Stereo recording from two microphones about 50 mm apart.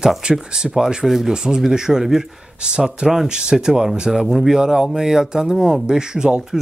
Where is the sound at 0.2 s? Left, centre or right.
Centre.